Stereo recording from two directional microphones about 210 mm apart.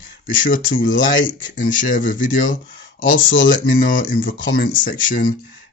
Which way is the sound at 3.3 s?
40° left (ahead or behind).